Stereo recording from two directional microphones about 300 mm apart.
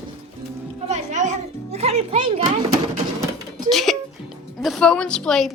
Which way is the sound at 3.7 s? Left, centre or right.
Centre.